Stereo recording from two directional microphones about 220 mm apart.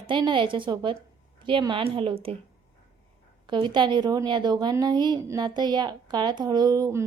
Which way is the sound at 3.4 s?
20° right (ahead or behind).